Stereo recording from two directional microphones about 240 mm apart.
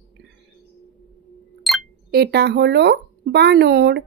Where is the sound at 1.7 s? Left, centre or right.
Centre.